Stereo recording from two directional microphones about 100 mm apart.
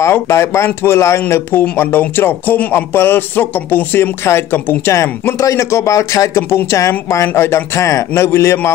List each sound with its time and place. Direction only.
0.0 s speech: 25° left (ahead or behind)